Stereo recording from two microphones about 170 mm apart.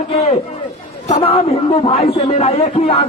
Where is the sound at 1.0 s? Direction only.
40° left (ahead or behind).